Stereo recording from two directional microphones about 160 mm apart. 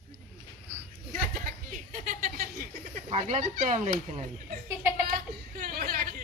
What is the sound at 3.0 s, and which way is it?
Speech, 45° right (ahead or behind).